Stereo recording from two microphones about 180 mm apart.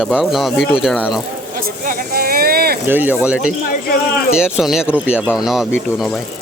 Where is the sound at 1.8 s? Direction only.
50° right (ahead or behind).